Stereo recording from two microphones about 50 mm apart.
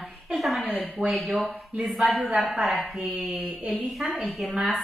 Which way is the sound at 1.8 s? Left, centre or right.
Centre.